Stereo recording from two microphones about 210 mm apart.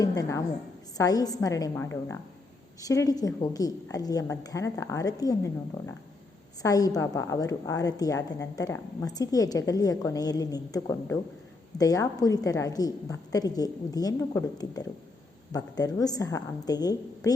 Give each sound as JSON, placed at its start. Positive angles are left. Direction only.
{"t": 0.2, "sound": "a woman's voice", "side_deg": 15}
{"t": 6.6, "sound": "a woman's voice", "side_deg": 15}